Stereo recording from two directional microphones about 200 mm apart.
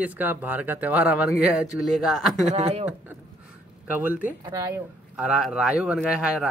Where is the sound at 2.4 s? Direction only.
30° right (ahead or behind).